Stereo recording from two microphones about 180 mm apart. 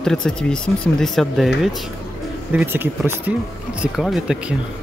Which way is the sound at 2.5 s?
10° right (ahead or behind).